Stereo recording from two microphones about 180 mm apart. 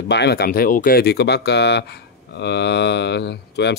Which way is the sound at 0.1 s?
65° left (ahead or behind).